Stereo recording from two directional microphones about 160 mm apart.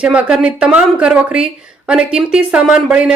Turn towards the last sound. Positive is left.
turn(degrees=-5)  # may be behind; listen again after turning